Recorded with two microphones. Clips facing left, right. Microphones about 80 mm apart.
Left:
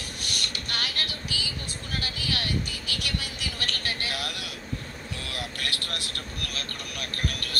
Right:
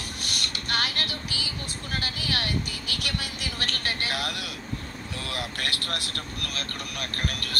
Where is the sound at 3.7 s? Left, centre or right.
Right.